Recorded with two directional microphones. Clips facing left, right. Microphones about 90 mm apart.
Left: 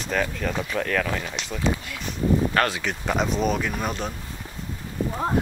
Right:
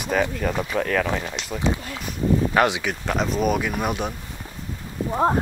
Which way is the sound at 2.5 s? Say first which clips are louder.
Right 4 dB; 20° right (ahead or behind).